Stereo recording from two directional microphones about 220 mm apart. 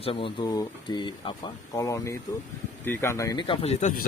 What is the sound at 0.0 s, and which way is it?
Speech, 25° left (ahead or behind).